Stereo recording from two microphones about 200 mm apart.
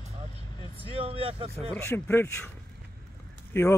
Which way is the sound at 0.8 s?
30° right (ahead or behind).